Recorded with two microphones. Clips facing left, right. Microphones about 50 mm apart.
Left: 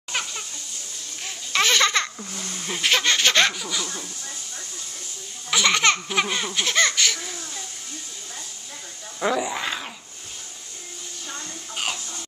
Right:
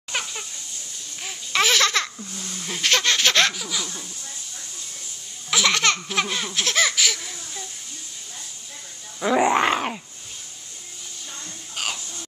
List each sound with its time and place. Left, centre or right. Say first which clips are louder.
0.1 s a sound: even; centre
1.2 s babbling: right 1 dB; centre
2.1 s speech: left 1 dB; left
2.6 s laughter: even; centre
5.5 s laughter: left 1 dB; centre
9.4 s speech: right 9 dB; right
11.7 s music: left 1 dB; centre